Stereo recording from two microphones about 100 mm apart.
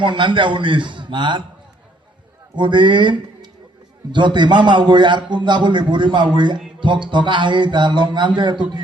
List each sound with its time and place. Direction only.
0.0 s a man's voice: 55° right (ahead or behind)
2.6 s a man's voice: 50° right (ahead or behind)